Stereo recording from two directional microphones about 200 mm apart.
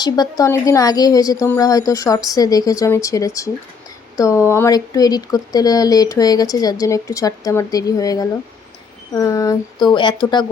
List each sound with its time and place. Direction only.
0.0 s speech: 20° left (ahead or behind)